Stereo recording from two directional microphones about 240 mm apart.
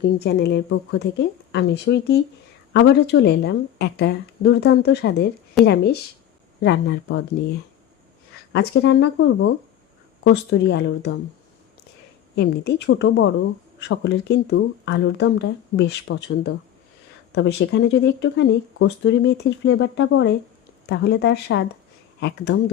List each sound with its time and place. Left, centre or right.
0.0 s speech: left
8.5 s speech: left
12.4 s speech: left